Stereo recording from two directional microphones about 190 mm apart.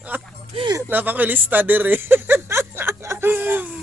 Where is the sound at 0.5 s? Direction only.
25° right (ahead or behind).